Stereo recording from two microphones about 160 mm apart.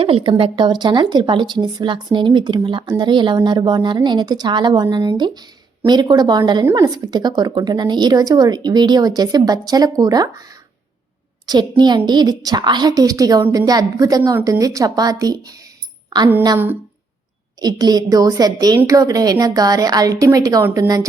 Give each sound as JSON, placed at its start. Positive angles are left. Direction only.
{"t": 0.0, "sound": "a woman's voice", "side_deg": -35}
{"t": 11.4, "sound": "a woman's voice", "side_deg": -25}
{"t": 16.0, "sound": "music", "side_deg": -25}
{"t": 17.6, "sound": "a woman's voice", "side_deg": -25}